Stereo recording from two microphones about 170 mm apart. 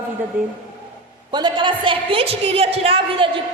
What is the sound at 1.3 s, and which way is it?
A woman's voice, 25° right (ahead or behind).